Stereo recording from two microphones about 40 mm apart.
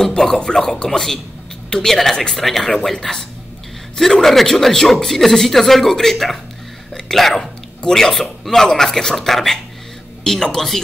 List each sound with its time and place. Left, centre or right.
0.0 s a sound: centre
0.4 s a man's voice: centre
2.3 s a man's voice: centre